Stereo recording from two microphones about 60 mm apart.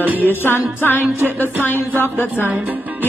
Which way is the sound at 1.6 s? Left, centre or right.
Left.